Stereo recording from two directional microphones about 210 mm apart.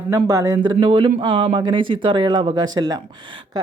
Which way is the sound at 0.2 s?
15° right (ahead or behind).